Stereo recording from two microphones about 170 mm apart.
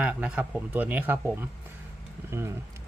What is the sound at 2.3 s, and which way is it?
Speech, 15° right (ahead or behind).